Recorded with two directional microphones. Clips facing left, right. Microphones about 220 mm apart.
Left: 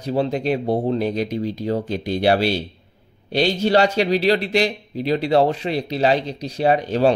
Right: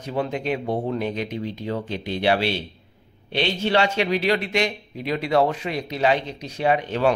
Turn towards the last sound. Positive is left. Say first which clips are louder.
# left 4 dB
turn(degrees=35)  # may be behind; listen again after turning